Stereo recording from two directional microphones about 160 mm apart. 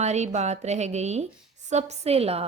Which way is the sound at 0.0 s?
45° right (ahead or behind).